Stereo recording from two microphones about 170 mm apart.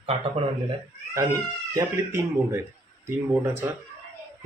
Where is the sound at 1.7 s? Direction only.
15° right (ahead or behind).